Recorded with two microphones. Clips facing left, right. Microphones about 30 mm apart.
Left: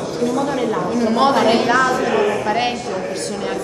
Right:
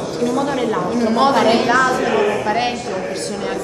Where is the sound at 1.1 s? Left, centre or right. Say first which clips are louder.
Right 1 dB; centre.